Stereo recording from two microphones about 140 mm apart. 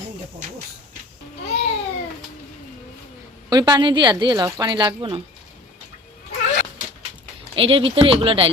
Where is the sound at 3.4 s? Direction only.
30° right (ahead or behind).